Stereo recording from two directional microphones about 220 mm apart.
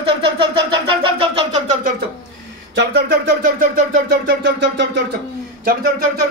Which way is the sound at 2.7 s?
55° right (ahead or behind).